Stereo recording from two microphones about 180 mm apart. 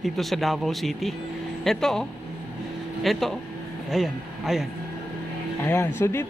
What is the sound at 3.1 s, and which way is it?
Speech, centre (ahead or behind).